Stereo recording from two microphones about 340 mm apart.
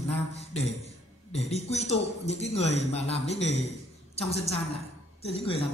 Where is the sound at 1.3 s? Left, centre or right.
Centre.